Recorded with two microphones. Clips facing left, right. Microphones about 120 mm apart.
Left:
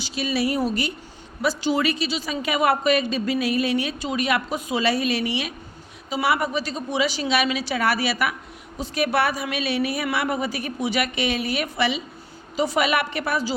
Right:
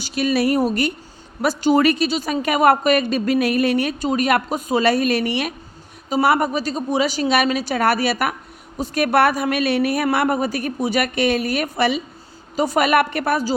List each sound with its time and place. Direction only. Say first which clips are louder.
0.0 s a woman's voice: right 5 dB; 55° right (ahead or behind)